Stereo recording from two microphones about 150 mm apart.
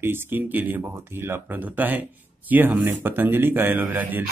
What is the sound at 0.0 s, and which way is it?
Speech, 15° right (ahead or behind).